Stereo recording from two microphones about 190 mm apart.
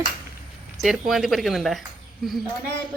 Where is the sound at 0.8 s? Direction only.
Centre (ahead or behind).